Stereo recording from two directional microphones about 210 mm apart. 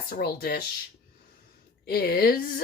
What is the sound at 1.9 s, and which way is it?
Speech, 45° left (ahead or behind).